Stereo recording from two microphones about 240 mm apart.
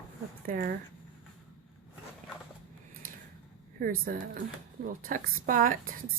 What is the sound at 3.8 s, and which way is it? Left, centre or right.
A woman's voice, right.